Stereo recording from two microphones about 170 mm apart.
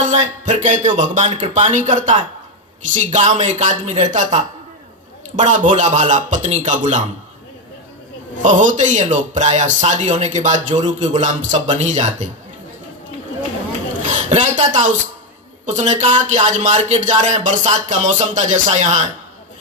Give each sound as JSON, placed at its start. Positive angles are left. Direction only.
{"t": 0.0, "sound": "speech", "side_deg": -45}
{"t": 8.4, "sound": "speech", "side_deg": -45}
{"t": 14.1, "sound": "speech", "side_deg": -45}